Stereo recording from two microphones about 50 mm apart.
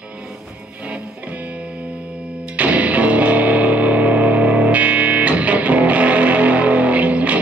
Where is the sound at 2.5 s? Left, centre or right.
Right.